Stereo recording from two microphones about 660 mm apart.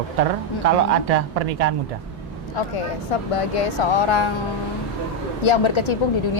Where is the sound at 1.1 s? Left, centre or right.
Right.